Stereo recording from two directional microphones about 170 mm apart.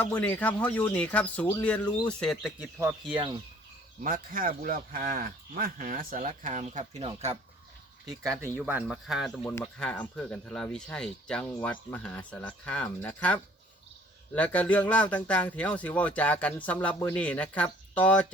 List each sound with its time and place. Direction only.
0.0 s a man's voice: 10° left (ahead or behind); by 2.9 s 10° right (ahead or behind)
3.1 s speech: 30° right (ahead or behind)
4.0 s speech: 55° right (ahead or behind); by 7.3 s 35° right (ahead or behind)
8.2 s a man's voice: 15° right (ahead or behind); by 18.3 s 10° left (ahead or behind)